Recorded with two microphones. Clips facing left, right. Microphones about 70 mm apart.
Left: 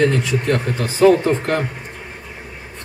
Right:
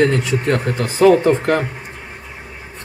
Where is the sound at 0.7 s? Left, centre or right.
Right.